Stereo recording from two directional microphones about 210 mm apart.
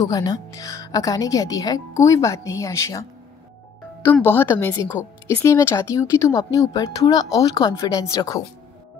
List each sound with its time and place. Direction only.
0.0 s speech: 15° left (ahead or behind)